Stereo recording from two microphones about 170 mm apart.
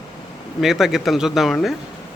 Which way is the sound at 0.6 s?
Centre (ahead or behind).